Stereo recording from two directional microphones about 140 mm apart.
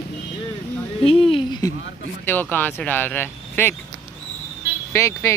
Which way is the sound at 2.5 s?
15° left (ahead or behind).